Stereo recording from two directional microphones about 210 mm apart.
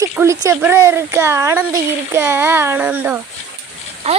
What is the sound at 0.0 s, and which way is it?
Speech, 15° right (ahead or behind).